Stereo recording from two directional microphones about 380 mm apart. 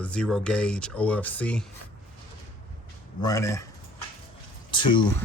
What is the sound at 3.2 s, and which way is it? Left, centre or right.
Speech, centre.